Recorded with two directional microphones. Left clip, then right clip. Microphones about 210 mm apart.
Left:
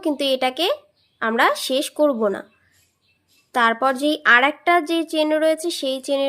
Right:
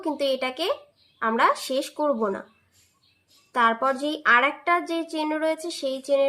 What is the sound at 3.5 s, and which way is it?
A woman's voice, 40° left (ahead or behind).